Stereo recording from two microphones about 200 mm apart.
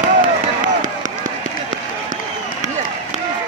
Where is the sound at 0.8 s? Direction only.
40° right (ahead or behind).